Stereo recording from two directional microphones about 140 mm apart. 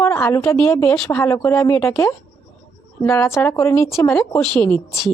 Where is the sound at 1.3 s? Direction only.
20° left (ahead or behind).